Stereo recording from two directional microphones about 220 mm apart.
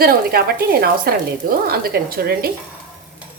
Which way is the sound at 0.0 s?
45° right (ahead or behind).